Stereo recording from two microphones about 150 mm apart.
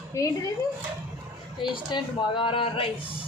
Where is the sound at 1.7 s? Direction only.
35° left (ahead or behind).